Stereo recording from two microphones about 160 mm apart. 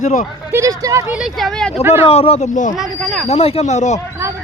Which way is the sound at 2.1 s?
40° left (ahead or behind).